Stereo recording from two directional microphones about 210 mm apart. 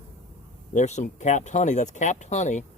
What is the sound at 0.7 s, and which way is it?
Speech, 35° left (ahead or behind).